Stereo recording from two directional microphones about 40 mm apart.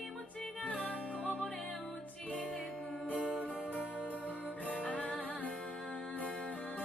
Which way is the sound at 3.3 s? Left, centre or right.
Left.